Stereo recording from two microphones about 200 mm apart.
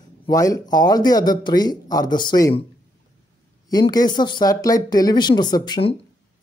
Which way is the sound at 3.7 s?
20° left (ahead or behind).